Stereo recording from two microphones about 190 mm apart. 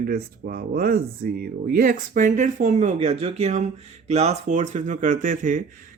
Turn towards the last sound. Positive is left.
turn(degrees=-45)  # may be behind; listen again after turning